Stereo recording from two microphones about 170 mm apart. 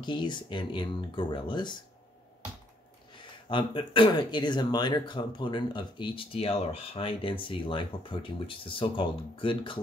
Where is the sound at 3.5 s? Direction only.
30° left (ahead or behind).